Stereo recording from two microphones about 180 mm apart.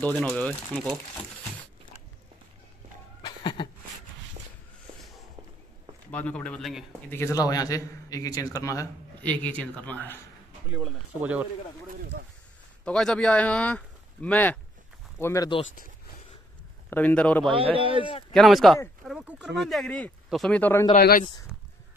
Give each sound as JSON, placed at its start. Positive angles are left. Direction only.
{"t": 0.0, "sound": "a man's voice", "side_deg": 5}
{"t": 3.2, "sound": "a sound", "side_deg": 25}
{"t": 6.1, "sound": "speech", "side_deg": 5}
{"t": 7.1, "sound": "a man's voice", "side_deg": 15}
{"t": 10.7, "sound": "speech", "side_deg": 0}
{"t": 12.8, "sound": "a man's voice", "side_deg": 5}
{"t": 16.9, "sound": "a man's voice", "side_deg": 10}
{"t": 17.7, "sound": "speech", "side_deg": -30}
{"t": 18.3, "sound": "speech", "side_deg": 0}
{"t": 21.0, "sound": "speech", "side_deg": 55}